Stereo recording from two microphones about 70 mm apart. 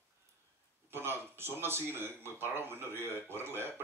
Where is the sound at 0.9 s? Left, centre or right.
Right.